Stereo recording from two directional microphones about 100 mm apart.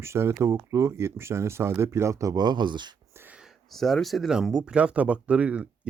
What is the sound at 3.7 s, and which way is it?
Speech, centre (ahead or behind).